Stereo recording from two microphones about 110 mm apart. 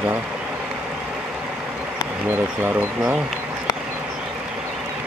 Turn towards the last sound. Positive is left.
turn(degrees=-20)  # may be behind; listen again after turning